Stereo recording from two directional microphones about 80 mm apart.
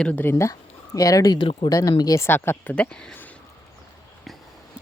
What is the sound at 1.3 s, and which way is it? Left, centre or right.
Speech, left.